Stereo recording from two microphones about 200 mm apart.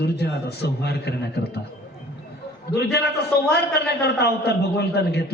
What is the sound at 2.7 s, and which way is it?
A man's voice, 55° left (ahead or behind).